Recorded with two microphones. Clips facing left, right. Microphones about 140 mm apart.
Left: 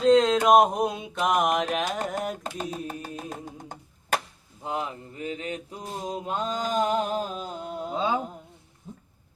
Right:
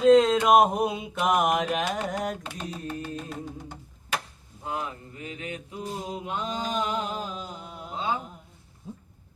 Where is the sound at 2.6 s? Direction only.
45° left (ahead or behind).